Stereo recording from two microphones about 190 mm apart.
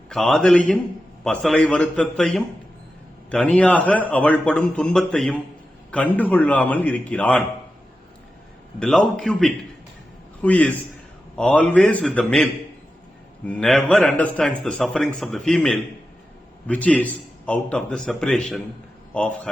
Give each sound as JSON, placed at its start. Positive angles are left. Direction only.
{"t": 0.1, "sound": "a man's voice", "side_deg": 0}
{"t": 8.8, "sound": "a man's voice", "side_deg": 5}